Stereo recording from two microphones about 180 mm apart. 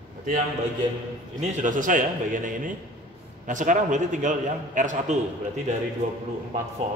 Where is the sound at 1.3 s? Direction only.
45° right (ahead or behind).